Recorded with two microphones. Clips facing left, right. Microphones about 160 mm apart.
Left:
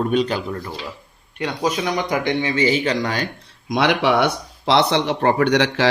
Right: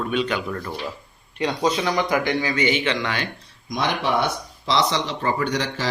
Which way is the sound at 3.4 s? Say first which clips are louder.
Left 6 dB; 70° left (ahead or behind).